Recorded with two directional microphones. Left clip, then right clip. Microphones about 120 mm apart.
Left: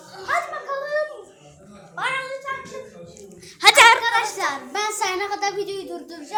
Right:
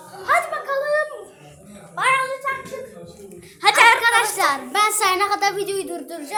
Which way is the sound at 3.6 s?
90° left.